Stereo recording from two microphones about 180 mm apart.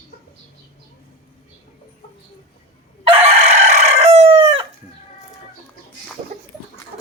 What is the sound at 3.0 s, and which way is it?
Chicken, 35° right (ahead or behind).